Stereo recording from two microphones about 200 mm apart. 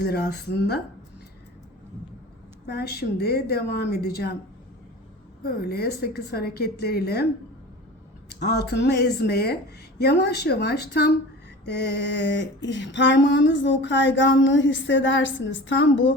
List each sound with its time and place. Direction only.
0.0 s a woman's voice: 55° left (ahead or behind)
2.6 s a woman's voice: 55° left (ahead or behind)
5.4 s a woman's voice: 50° left (ahead or behind)
8.4 s speech: 55° left (ahead or behind)